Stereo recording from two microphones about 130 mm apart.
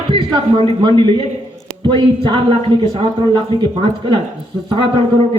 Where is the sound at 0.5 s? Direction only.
40° right (ahead or behind).